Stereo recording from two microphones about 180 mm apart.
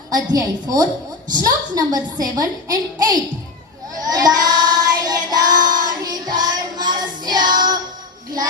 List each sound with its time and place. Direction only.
0.1 s a woman's voice: 20° right (ahead or behind)
3.9 s child singing: 20° right (ahead or behind)